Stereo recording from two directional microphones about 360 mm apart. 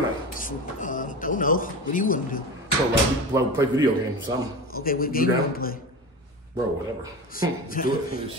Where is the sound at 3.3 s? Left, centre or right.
Centre.